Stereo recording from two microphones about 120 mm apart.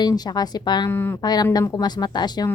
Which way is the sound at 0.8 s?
20° left (ahead or behind).